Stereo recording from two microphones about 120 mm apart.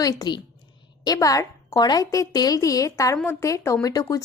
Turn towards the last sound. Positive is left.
turn(degrees=30)  # may be behind; listen again after turning